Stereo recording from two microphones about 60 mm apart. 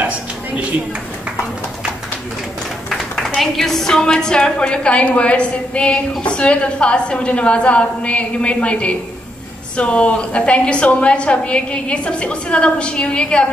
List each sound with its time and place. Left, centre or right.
3.3 s a woman's voice: centre